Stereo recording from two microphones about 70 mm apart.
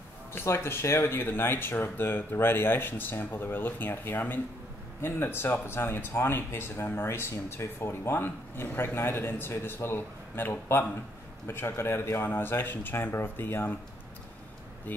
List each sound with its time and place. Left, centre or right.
0.3 s speech: left
14.9 s speech: left